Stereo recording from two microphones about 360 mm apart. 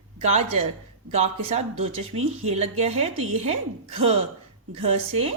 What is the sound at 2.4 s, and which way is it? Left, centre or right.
A woman's voice, centre.